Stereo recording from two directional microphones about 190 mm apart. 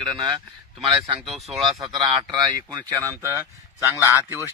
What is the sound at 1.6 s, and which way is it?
A man's voice, 25° right (ahead or behind).